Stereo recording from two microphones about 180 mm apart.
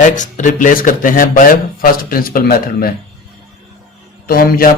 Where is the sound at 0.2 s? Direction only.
45° left (ahead or behind).